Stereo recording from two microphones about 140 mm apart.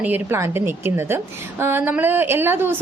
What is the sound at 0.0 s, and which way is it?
A woman's voice, 15° right (ahead or behind).